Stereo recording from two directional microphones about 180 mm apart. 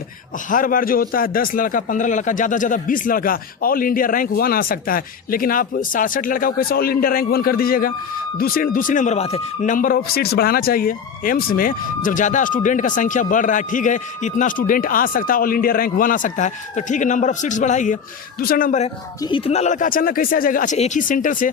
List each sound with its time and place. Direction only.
0.5 s speech: 50° left (ahead or behind)
19.2 s speech: 30° left (ahead or behind); by 21.5 s 45° left (ahead or behind)